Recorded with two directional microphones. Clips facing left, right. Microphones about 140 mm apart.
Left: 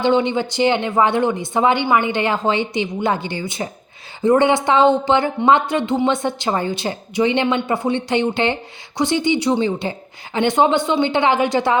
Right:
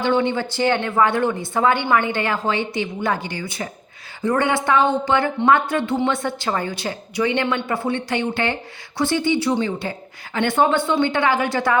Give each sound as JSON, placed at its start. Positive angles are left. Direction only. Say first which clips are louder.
{"t": 0.0, "sound": "speech", "louder": "left 3 dB", "side_deg": 20}